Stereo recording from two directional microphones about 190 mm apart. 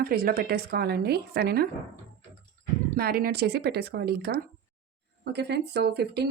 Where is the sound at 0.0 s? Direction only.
50° right (ahead or behind).